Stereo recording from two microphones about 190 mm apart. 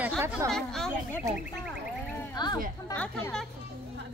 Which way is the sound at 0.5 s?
Centre (ahead or behind).